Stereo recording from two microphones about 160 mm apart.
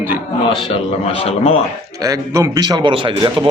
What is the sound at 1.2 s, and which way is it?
Speech, 40° left (ahead or behind).